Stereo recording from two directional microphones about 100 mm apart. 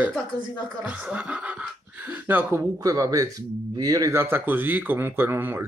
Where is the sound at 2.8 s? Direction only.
35° right (ahead or behind).